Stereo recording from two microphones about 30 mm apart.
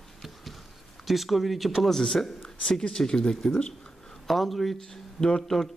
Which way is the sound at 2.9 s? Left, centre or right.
Left.